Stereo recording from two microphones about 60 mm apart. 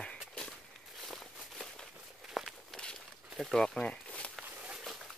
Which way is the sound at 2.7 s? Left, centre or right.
Centre.